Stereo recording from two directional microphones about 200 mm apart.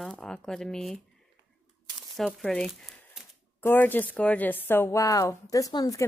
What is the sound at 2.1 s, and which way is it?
Speech, centre (ahead or behind).